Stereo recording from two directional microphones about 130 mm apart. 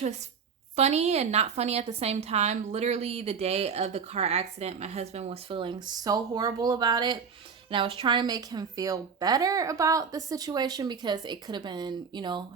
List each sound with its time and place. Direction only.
0.8 s a woman's voice: 55° right (ahead or behind); by 7.2 s 30° right (ahead or behind)
7.7 s a woman's voice: 45° right (ahead or behind)